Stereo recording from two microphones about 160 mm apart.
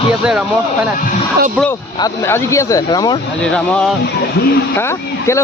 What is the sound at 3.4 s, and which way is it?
Speech, 5° left (ahead or behind).